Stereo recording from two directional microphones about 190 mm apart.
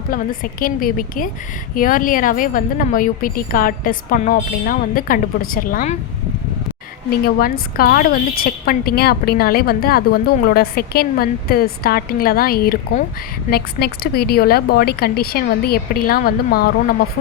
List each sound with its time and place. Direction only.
0.1 s a woman's voice: 50° left (ahead or behind)
7.3 s a woman's voice: 50° left (ahead or behind)